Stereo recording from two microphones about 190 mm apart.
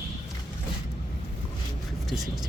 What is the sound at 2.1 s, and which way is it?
Speech, centre (ahead or behind).